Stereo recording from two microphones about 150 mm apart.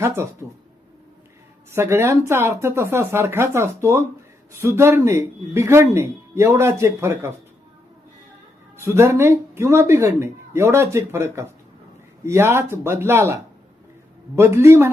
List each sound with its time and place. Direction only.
0.0 s speech: 20° right (ahead or behind)
1.7 s a man's voice: 15° right (ahead or behind)
8.8 s a man's voice: 15° right (ahead or behind)